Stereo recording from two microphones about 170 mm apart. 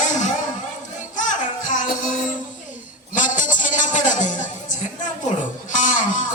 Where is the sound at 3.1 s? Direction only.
50° left (ahead or behind).